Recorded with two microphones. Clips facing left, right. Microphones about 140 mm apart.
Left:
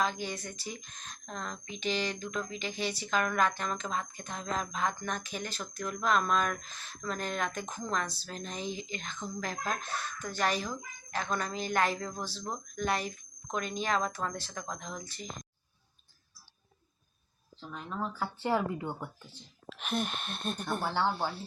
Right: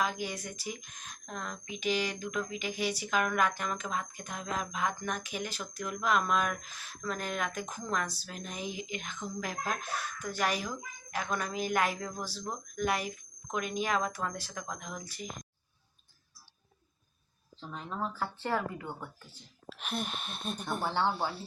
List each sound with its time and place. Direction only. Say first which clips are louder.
0.0 s speech: left 1 dB; 10° right (ahead or behind)
18.0 s speech: even; centre (ahead or behind)
18.4 s speech: left 4 dB; 20° left (ahead or behind)
19.3 s speech: left 1 dB; centre (ahead or behind)
20.8 s speech: right 1 dB; 20° right (ahead or behind)
21.1 s speech: even; 5° right (ahead or behind)